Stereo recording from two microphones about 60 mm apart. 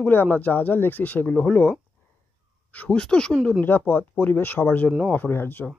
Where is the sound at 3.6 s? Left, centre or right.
Left.